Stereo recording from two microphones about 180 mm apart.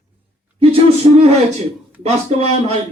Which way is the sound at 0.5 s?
30° right (ahead or behind).